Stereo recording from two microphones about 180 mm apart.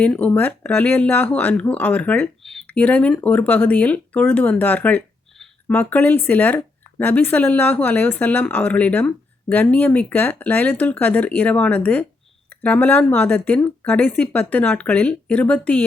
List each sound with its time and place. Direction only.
0.0 s speech: 10° left (ahead or behind)